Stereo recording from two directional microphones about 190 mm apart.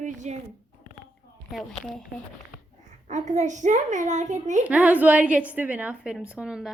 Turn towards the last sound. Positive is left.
turn(degrees=-5)  # may be behind; listen again after turning